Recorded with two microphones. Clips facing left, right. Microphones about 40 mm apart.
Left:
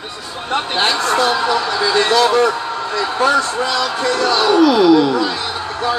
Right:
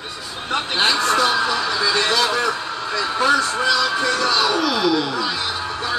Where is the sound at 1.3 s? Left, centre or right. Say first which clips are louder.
Left 3 dB; left.